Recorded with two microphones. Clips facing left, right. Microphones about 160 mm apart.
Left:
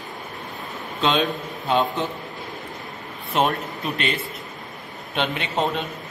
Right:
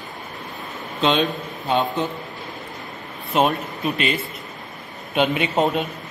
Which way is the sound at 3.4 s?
Centre (ahead or behind).